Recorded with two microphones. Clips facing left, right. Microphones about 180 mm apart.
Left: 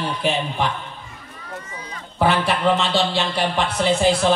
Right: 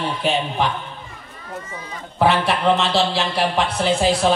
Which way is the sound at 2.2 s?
Centre (ahead or behind).